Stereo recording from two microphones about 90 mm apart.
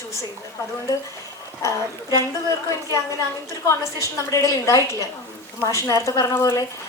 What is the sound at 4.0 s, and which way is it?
A woman's voice, 40° left (ahead or behind).